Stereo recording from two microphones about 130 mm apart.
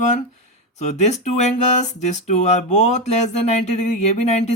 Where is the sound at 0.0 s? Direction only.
65° left (ahead or behind).